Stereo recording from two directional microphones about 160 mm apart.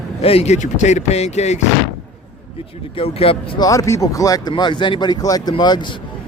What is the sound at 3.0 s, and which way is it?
Speech, 35° left (ahead or behind).